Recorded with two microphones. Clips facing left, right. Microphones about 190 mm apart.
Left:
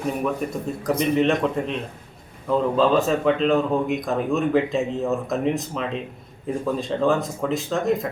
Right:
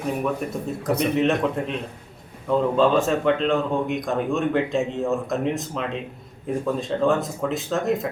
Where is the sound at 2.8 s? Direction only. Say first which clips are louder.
Left 1 dB; centre (ahead or behind).